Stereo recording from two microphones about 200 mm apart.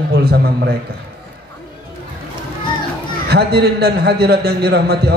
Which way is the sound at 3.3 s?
55° right (ahead or behind).